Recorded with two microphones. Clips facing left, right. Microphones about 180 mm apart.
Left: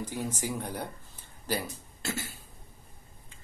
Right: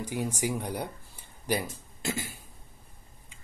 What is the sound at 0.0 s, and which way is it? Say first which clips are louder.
Speech: right 3 dB; 15° right (ahead or behind).